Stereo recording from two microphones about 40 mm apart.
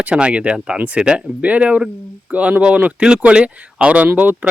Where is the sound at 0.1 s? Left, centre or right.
Right.